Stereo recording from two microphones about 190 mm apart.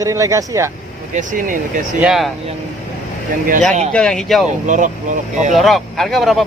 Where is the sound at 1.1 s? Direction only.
45° right (ahead or behind).